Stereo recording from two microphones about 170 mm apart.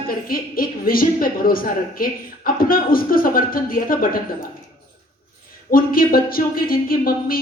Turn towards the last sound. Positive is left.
turn(degrees=60)  # may be behind; listen again after turning